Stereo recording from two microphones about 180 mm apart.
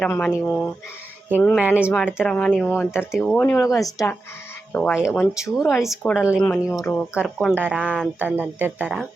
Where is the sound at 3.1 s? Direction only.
Centre (ahead or behind).